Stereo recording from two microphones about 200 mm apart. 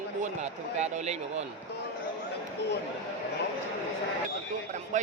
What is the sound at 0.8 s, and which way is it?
Speech, 35° right (ahead or behind).